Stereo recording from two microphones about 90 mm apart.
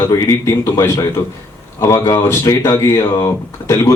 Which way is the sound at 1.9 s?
45° left (ahead or behind).